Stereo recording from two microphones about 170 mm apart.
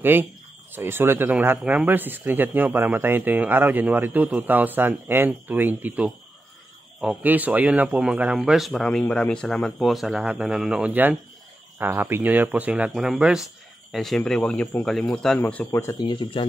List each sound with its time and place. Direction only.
0.0 s a man's voice: 10° right (ahead or behind); by 16.1 s 15° left (ahead or behind)
16.1 s speech: 30° left (ahead or behind)